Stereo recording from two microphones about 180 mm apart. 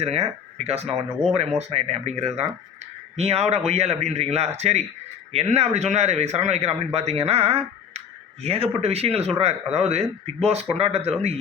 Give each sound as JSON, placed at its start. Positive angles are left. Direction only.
{"t": 0.0, "sound": "speech", "side_deg": -35}